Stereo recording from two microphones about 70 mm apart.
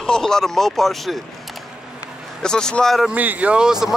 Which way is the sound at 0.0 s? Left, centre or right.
Centre.